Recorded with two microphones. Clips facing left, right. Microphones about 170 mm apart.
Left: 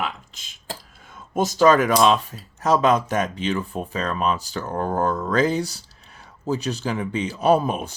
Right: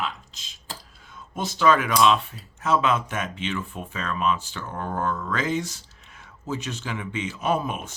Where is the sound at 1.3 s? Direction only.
45° left (ahead or behind).